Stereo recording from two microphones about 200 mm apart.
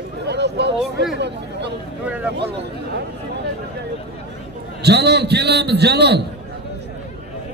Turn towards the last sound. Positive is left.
turn(degrees=-55)  # may be behind; listen again after turning